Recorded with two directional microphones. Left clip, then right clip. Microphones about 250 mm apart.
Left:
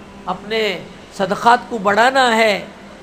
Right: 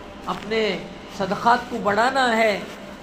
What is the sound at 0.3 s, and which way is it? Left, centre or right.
A man's voice, left.